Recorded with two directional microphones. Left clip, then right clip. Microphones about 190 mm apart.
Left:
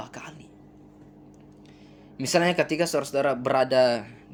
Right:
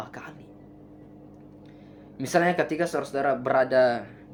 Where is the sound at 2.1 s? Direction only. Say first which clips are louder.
Even; 35° left (ahead or behind).